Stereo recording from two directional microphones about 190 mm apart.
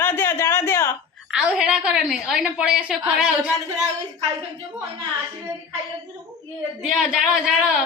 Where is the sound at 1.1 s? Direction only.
5° right (ahead or behind).